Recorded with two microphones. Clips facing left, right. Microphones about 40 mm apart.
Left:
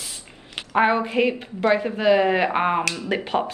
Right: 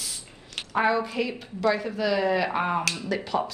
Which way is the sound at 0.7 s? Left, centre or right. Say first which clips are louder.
Left 5 dB; left.